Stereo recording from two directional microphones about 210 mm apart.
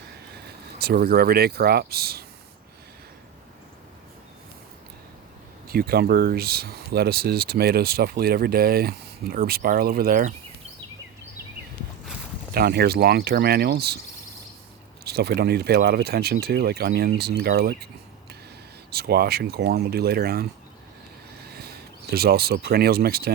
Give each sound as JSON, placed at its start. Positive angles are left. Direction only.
{"t": 0.8, "sound": "speech", "side_deg": -45}
{"t": 5.6, "sound": "speech", "side_deg": -45}
{"t": 12.5, "sound": "speech", "side_deg": -50}
{"t": 15.0, "sound": "speech", "side_deg": -50}
{"t": 18.9, "sound": "speech", "side_deg": -50}
{"t": 21.5, "sound": "speech", "side_deg": -50}